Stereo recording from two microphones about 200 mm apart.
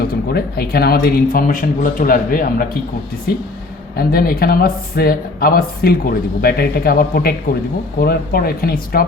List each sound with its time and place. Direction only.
0.0 s speech: 50° left (ahead or behind)
3.9 s speech: 50° left (ahead or behind)